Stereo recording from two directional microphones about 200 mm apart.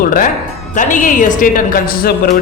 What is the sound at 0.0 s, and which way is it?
A man's voice, 45° left (ahead or behind).